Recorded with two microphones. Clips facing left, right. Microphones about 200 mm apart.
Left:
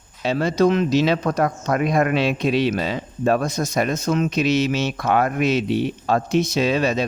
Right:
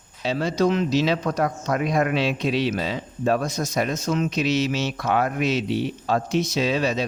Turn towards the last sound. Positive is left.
turn(degrees=55)  # may be behind; listen again after turning